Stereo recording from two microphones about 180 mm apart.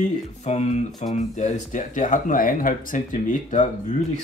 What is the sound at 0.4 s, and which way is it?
Speech, 35° left (ahead or behind).